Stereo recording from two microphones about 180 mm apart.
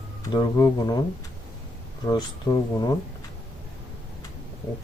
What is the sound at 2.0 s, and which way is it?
Speech, 20° left (ahead or behind).